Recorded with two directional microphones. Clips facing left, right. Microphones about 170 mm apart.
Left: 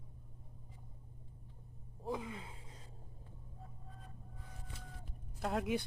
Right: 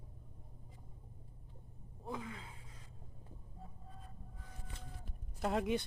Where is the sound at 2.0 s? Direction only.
20° left (ahead or behind).